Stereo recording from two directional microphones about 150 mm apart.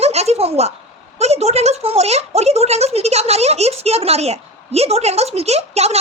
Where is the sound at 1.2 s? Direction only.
45° right (ahead or behind).